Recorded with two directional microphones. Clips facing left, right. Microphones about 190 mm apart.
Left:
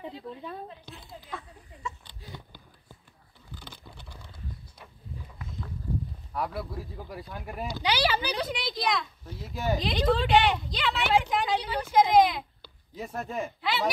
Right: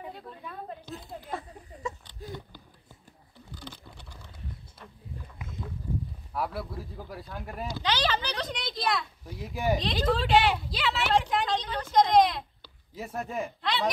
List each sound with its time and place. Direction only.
0.7 s a sound: 40° right (ahead or behind)
6.3 s a woman's voice: centre (ahead or behind)
7.8 s speech: 10° left (ahead or behind)
9.2 s a child's voice: 15° right (ahead or behind)
9.8 s a woman's voice: centre (ahead or behind)
11.5 s a woman's voice: 10° left (ahead or behind); by 13.5 s 5° right (ahead or behind)
13.6 s a sound: 5° left (ahead or behind)